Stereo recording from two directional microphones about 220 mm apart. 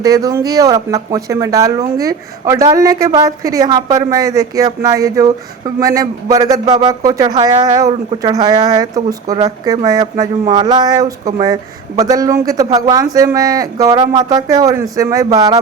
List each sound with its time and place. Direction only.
0.0 s speech: 15° right (ahead or behind)